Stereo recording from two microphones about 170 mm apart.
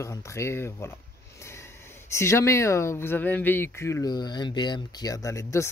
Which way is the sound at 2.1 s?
15° left (ahead or behind).